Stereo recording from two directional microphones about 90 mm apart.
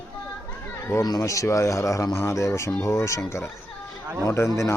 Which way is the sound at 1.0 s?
40° left (ahead or behind).